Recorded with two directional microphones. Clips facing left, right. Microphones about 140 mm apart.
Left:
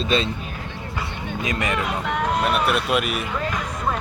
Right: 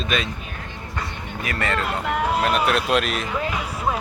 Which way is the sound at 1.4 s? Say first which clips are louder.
Even; 15° left (ahead or behind).